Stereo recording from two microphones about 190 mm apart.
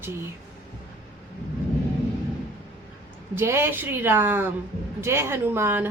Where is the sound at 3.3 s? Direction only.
15° right (ahead or behind).